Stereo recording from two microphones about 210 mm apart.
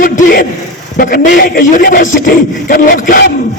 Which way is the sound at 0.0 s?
40° left (ahead or behind).